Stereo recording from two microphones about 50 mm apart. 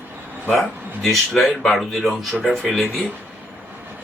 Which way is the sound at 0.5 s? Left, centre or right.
Centre.